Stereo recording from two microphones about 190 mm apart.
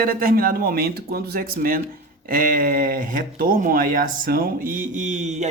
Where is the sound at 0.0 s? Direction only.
50° right (ahead or behind).